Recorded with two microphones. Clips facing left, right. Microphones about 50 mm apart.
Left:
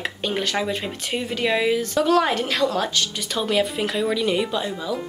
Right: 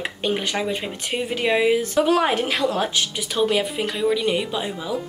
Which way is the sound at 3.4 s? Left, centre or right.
Centre.